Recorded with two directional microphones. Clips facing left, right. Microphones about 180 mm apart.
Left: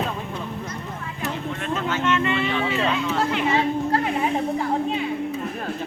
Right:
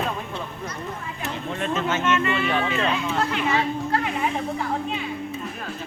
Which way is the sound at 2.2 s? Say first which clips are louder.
Even; 25° left (ahead or behind).